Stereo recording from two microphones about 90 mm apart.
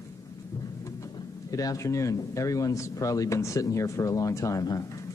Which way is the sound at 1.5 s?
40° left (ahead or behind).